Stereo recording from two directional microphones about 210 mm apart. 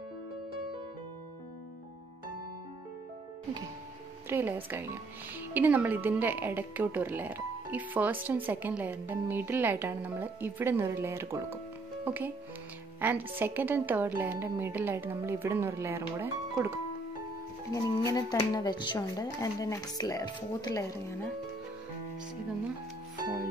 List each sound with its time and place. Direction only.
4.3 s speech: 10° right (ahead or behind)
17.7 s speech: 15° left (ahead or behind)